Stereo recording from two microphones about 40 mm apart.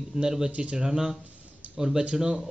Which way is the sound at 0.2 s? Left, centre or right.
Centre.